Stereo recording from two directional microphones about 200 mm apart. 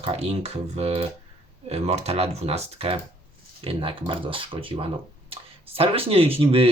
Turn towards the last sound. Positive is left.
turn(degrees=-30)  # may be behind; listen again after turning